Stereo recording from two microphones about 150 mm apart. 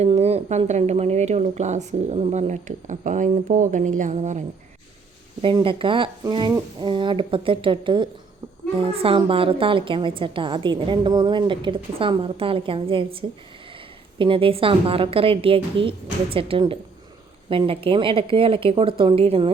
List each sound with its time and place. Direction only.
0.0 s speech: 45° right (ahead or behind)
5.4 s a woman's voice: 35° right (ahead or behind)